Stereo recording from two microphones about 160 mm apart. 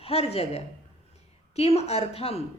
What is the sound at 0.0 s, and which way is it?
A woman's voice, 40° left (ahead or behind).